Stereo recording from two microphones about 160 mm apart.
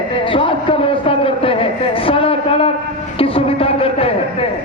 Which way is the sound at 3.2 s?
35° left (ahead or behind).